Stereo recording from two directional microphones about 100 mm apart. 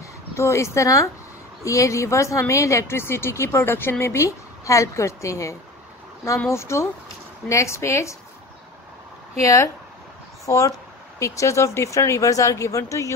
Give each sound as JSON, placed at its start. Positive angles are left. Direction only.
{"t": 0.4, "sound": "a woman's voice", "side_deg": 30}
{"t": 9.4, "sound": "speech", "side_deg": 30}